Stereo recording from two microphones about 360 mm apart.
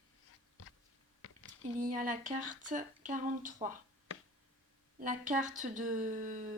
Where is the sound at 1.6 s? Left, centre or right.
Right.